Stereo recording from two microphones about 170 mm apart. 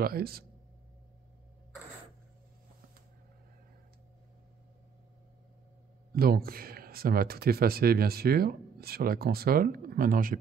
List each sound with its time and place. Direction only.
0.0 s speech: 65° right (ahead or behind)
6.1 s speech: 65° right (ahead or behind)